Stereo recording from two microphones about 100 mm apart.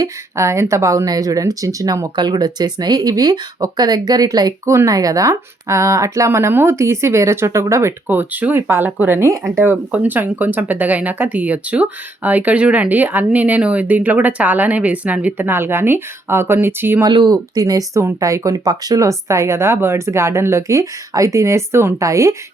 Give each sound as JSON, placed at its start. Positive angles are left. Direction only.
{"t": 0.0, "sound": "speech", "side_deg": -30}
{"t": 17.1, "sound": "speech", "side_deg": -45}